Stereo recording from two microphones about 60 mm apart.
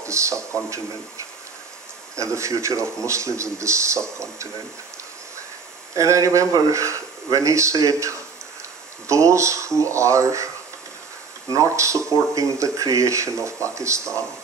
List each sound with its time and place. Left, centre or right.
0.0 s speech: right
5.9 s speech: right
11.5 s speech: right